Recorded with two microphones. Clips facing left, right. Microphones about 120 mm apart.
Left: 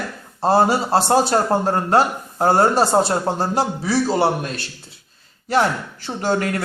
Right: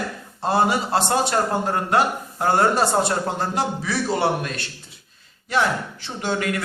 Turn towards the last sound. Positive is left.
turn(degrees=40)  # may be behind; listen again after turning